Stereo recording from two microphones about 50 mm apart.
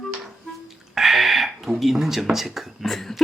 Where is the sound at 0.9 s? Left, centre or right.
Centre.